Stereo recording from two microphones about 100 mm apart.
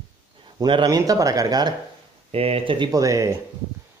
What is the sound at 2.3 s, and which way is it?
Speech, 75° right (ahead or behind).